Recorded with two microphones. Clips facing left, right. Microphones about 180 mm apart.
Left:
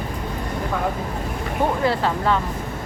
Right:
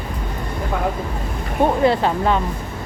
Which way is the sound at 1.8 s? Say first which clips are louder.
Right 4 dB; 20° right (ahead or behind).